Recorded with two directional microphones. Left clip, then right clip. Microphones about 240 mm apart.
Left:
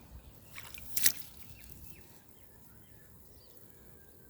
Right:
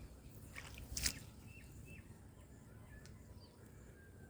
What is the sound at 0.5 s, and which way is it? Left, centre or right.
Squish, left.